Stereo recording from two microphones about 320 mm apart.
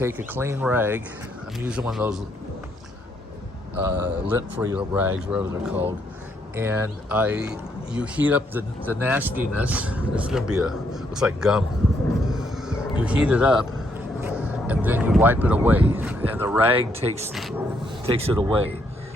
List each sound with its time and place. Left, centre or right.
0.0 s speech: centre
3.8 s speech: centre
12.3 s vehicle: centre
14.3 s speech: centre
16.9 s speech: centre
17.2 s speech: centre
18.0 s speech: centre